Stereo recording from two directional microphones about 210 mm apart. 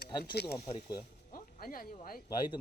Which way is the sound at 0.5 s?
15° left (ahead or behind).